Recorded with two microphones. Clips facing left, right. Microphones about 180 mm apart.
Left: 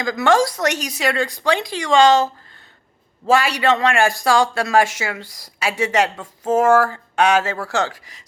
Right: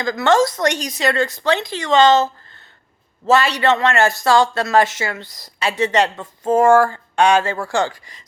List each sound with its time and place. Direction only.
0.0 s speech: 10° left (ahead or behind)